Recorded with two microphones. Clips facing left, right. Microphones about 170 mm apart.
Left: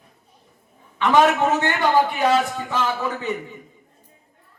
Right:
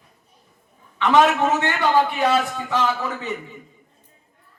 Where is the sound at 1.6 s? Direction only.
15° left (ahead or behind).